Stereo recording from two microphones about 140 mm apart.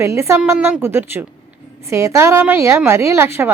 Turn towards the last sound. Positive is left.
turn(degrees=-15)  # may be behind; listen again after turning